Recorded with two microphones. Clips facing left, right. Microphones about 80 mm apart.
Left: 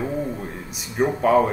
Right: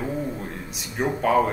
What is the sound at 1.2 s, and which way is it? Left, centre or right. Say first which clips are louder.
Speech: left 2 dB; left.